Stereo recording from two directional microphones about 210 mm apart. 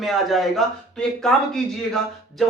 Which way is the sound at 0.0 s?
Centre (ahead or behind).